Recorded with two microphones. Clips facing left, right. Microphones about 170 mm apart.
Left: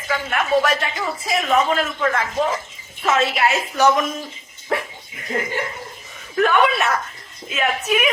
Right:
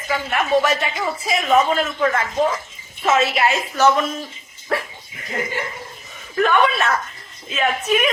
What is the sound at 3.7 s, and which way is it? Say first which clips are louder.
A woman's voice: right 1 dB; 15° left (ahead or behind).